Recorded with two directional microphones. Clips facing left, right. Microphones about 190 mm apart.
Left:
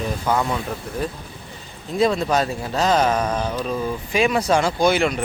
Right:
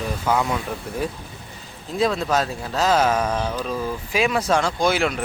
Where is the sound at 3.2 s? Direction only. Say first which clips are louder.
Left 1 dB; 10° left (ahead or behind).